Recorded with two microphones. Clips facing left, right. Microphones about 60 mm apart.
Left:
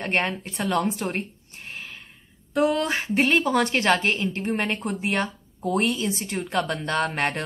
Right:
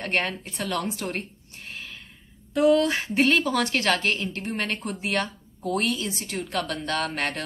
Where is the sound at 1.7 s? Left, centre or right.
Left.